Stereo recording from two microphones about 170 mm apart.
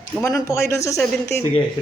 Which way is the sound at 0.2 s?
20° left (ahead or behind).